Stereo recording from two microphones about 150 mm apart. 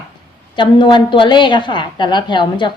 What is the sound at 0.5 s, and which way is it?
A woman's voice, 30° left (ahead or behind).